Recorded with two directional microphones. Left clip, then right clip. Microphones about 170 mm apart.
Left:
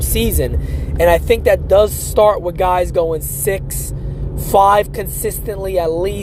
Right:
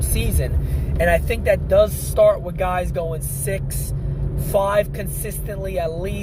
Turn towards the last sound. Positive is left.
turn(degrees=55)  # may be behind; listen again after turning